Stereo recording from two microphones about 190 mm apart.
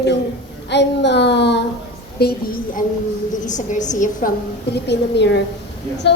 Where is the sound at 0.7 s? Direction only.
65° left (ahead or behind).